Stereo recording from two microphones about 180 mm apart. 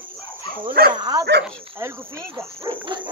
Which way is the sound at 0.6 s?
55° right (ahead or behind).